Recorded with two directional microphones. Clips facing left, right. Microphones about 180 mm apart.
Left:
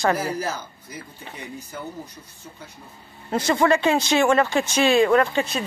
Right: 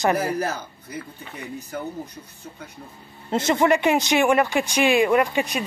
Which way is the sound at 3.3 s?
20° right (ahead or behind).